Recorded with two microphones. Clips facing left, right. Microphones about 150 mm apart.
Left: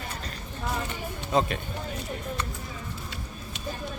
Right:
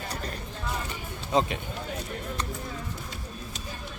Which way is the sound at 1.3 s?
20° right (ahead or behind).